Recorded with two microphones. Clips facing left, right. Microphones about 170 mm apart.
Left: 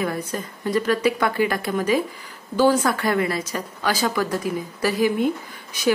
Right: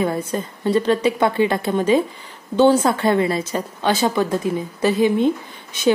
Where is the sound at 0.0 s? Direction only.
25° right (ahead or behind).